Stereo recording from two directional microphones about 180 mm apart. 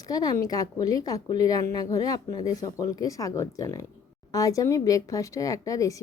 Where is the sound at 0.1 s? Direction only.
20° left (ahead or behind).